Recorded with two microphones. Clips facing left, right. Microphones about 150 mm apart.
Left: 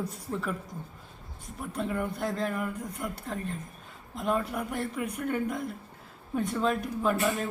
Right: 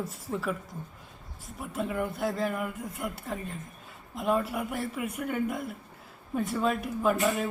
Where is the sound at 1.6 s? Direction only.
5° right (ahead or behind).